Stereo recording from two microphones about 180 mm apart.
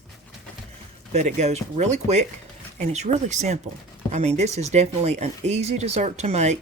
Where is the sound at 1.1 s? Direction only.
40° right (ahead or behind).